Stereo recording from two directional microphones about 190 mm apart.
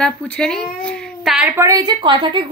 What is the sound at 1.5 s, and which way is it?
Speech, 20° right (ahead or behind).